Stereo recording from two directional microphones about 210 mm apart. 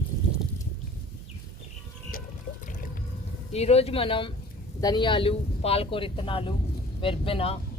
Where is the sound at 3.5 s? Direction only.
30° left (ahead or behind).